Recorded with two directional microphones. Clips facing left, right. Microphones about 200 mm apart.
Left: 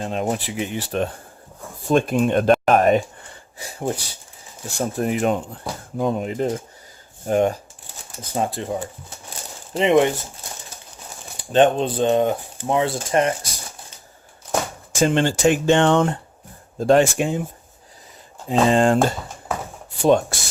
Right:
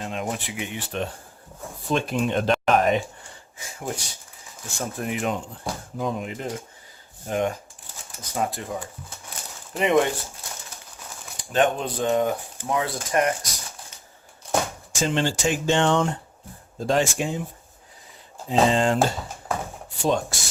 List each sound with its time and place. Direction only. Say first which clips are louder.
0.0 s speech: left 6 dB; 35° left (ahead or behind)
3.6 s speech: left 6 dB; 35° left (ahead or behind)
8.2 s speech: left 3 dB; 30° left (ahead or behind)
9.7 s speech: left 4 dB; 25° left (ahead or behind)
11.5 s speech: left 6 dB; 30° left (ahead or behind)
14.9 s speech: left 6 dB; 55° left (ahead or behind)
18.4 s speech: left 4 dB; 50° left (ahead or behind)
20.0 s speech: left 7 dB; 60° left (ahead or behind)